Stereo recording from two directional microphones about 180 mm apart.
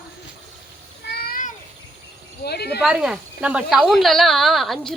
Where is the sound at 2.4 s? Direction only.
65° left (ahead or behind).